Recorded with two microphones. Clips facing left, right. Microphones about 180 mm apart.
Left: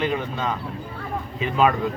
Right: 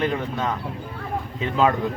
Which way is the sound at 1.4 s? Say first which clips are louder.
Left 1 dB; 15° left (ahead or behind).